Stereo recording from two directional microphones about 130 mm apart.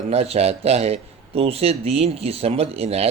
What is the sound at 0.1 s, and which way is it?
Speech, 55° right (ahead or behind).